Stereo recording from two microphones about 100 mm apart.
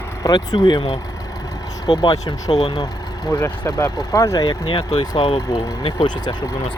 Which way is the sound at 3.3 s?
30° left (ahead or behind).